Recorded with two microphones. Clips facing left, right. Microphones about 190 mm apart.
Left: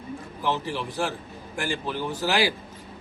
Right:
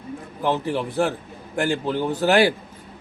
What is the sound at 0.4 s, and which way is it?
A man's voice, 55° right (ahead or behind).